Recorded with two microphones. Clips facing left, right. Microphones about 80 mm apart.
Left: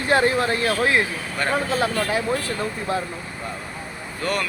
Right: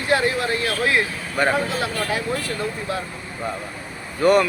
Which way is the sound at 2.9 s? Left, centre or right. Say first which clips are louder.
Left 4 dB; left.